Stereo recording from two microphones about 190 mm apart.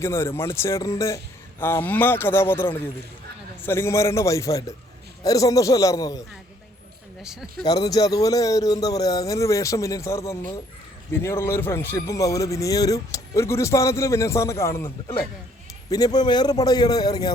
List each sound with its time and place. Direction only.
0.0 s a man's voice: 15° left (ahead or behind)
7.6 s a man's voice: 20° left (ahead or behind)
15.9 s a man's voice: 20° left (ahead or behind)